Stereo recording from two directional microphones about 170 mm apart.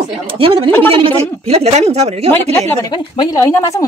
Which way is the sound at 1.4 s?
35° right (ahead or behind).